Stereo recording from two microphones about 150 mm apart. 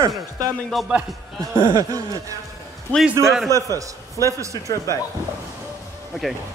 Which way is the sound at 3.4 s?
20° right (ahead or behind).